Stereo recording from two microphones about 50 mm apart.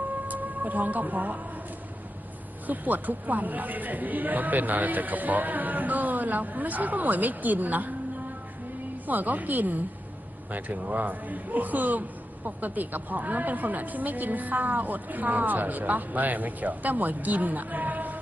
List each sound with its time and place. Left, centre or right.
0.3 s speech: right
2.6 s speech: right
9.0 s speech: right